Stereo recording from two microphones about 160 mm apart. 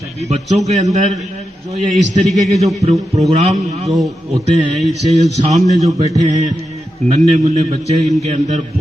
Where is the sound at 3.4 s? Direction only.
45° right (ahead or behind).